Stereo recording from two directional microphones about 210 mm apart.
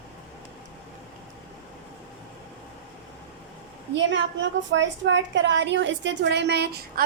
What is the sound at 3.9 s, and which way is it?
A woman's voice, 60° right (ahead or behind).